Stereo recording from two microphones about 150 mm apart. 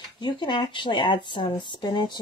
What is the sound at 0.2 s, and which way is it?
Speech, 30° left (ahead or behind).